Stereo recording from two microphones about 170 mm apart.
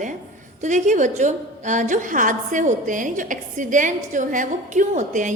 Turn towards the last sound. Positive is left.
turn(degrees=-45)  # may be behind; listen again after turning